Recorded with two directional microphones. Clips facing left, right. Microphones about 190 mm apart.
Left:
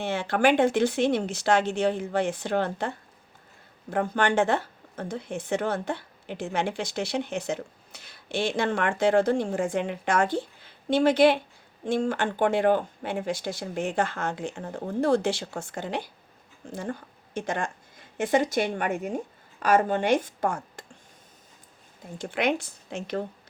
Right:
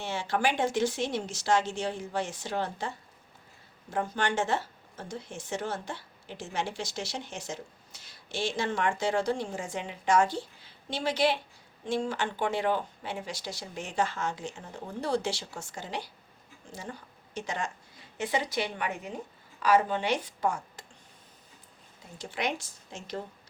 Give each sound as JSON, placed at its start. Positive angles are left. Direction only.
{"t": 0.0, "sound": "a woman's voice", "side_deg": 55}
{"t": 22.2, "sound": "speech", "side_deg": 55}